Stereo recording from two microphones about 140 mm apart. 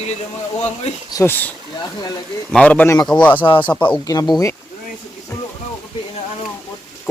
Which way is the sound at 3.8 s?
30° left (ahead or behind).